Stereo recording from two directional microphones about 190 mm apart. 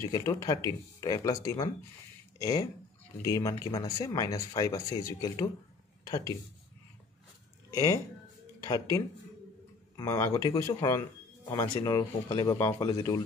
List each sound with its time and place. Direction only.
0.0 s speech: 15° left (ahead or behind)
7.7 s speech: 20° left (ahead or behind)
9.9 s speech: 15° left (ahead or behind)